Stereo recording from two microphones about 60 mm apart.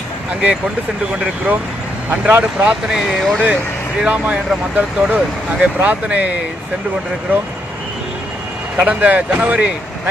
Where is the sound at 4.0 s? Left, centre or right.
Right.